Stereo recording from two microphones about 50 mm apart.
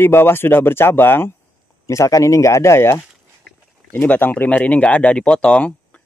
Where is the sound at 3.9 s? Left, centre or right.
Left.